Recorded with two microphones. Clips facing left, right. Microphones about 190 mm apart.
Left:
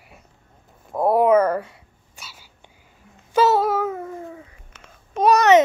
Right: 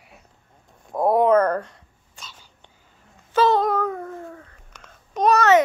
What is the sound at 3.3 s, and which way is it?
Babbling, 5° left (ahead or behind).